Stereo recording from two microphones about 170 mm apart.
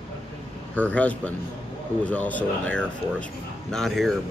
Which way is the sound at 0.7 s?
10° left (ahead or behind).